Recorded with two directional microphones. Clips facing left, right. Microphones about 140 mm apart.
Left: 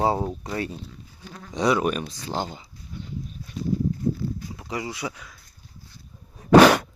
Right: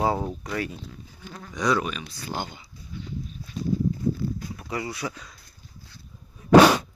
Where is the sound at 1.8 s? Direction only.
55° left (ahead or behind).